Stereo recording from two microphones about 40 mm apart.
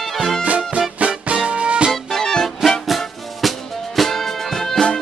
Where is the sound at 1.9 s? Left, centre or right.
Centre.